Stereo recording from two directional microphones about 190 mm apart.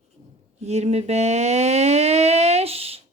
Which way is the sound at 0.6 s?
35° right (ahead or behind).